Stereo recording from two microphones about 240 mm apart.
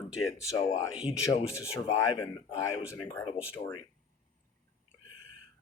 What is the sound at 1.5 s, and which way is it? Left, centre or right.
Speech, centre.